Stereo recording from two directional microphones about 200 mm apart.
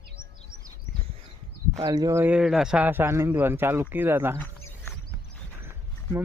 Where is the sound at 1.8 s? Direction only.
20° right (ahead or behind).